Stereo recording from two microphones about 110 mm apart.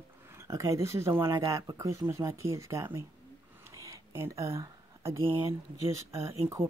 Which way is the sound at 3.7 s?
30° right (ahead or behind).